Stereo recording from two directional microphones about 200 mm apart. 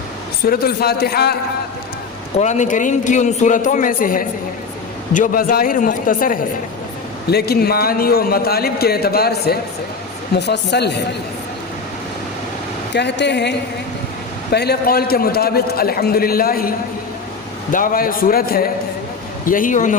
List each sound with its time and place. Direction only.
0.4 s a man's voice: 50° left (ahead or behind)
2.3 s a man's voice: 35° left (ahead or behind); by 11.0 s 55° left (ahead or behind)
12.9 s a man's voice: 60° left (ahead or behind); by 20.0 s 40° left (ahead or behind)